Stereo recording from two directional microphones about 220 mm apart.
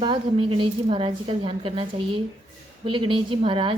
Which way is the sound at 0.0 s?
25° right (ahead or behind).